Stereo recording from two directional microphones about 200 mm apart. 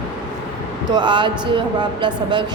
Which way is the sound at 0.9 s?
20° right (ahead or behind).